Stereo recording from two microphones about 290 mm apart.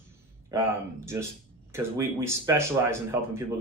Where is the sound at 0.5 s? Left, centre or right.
Centre.